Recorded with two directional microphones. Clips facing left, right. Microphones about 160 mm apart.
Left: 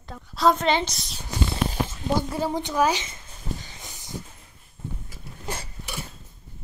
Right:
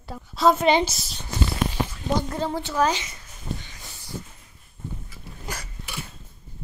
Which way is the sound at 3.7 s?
20° left (ahead or behind).